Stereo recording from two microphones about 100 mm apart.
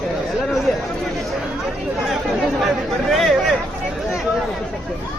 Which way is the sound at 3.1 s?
Centre (ahead or behind).